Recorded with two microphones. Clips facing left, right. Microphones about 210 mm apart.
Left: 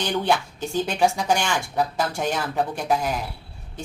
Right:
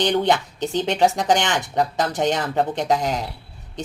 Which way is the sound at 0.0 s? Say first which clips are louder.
Right 4 dB; 20° right (ahead or behind).